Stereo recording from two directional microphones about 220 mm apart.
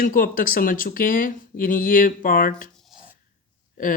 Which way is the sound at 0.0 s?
40° left (ahead or behind).